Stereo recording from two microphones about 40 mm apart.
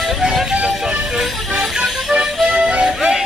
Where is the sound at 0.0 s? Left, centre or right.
Centre.